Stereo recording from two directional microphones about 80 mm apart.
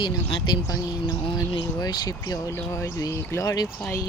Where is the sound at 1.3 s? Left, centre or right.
Left.